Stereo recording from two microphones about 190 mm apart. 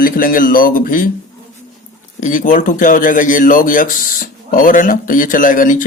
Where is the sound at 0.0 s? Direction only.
50° left (ahead or behind).